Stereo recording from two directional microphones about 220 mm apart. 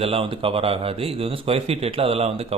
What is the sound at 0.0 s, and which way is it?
Speech, 25° right (ahead or behind).